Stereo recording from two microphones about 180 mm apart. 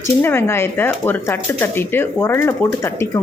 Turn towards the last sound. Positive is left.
turn(degrees=15)  # may be behind; listen again after turning